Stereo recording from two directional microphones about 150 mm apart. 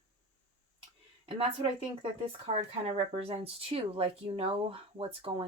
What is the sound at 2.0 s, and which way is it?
Speech, 40° right (ahead or behind).